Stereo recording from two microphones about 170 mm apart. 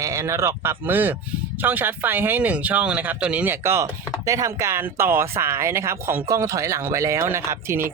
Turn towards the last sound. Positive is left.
turn(degrees=-15)  # may be behind; listen again after turning